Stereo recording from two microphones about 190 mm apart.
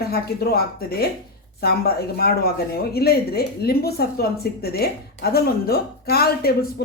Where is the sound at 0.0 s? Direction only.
55° left (ahead or behind).